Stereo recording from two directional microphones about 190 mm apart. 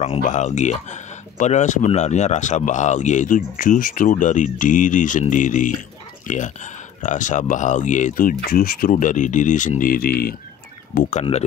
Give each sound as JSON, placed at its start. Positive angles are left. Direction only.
{"t": 0.0, "sound": "speech", "side_deg": 40}
{"t": 11.0, "sound": "speech", "side_deg": 40}